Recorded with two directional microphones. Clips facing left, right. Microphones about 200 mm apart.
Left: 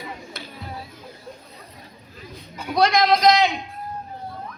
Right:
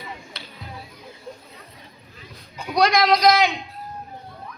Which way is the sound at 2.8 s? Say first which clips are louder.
Even; 25° left (ahead or behind).